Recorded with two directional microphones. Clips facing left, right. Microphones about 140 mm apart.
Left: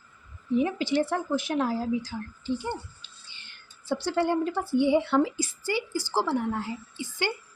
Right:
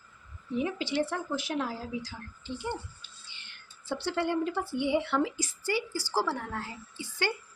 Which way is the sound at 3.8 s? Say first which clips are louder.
Left 5 dB; 40° left (ahead or behind).